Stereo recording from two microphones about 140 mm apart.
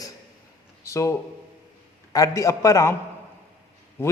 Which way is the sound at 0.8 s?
20° left (ahead or behind).